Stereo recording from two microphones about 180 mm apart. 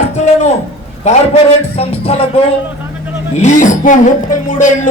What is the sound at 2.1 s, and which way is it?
Speech, 35° left (ahead or behind).